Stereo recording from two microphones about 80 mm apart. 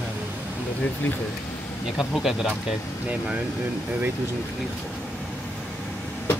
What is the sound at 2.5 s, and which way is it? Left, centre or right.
Speech, centre.